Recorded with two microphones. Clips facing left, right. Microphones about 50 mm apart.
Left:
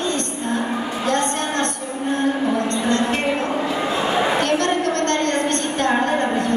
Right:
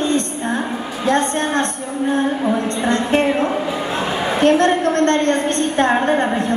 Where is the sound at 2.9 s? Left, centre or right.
Right.